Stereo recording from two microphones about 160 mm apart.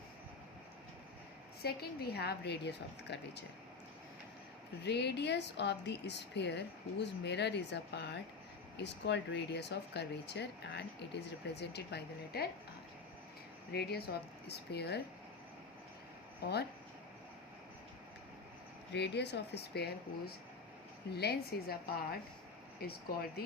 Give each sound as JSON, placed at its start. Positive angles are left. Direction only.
{"t": 1.6, "sound": "speech", "side_deg": 80}
{"t": 4.8, "sound": "speech", "side_deg": 90}
{"t": 13.7, "sound": "speech", "side_deg": 90}
{"t": 16.4, "sound": "speech", "side_deg": 90}
{"t": 18.9, "sound": "a woman's voice", "side_deg": 90}